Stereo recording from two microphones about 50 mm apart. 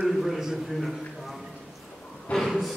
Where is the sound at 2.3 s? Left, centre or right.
Centre.